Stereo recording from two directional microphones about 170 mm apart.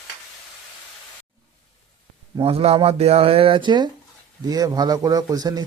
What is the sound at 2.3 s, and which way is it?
Speech, 35° right (ahead or behind).